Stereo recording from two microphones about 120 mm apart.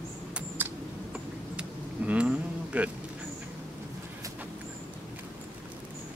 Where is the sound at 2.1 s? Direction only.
10° right (ahead or behind).